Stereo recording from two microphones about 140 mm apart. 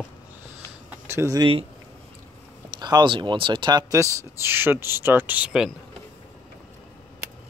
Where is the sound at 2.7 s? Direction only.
30° right (ahead or behind).